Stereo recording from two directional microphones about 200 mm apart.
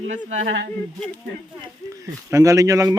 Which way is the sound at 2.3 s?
15° right (ahead or behind).